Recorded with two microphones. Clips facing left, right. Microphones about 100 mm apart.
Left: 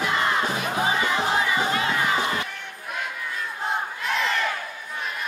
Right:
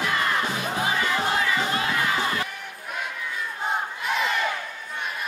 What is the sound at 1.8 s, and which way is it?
Crowd, 25° left (ahead or behind).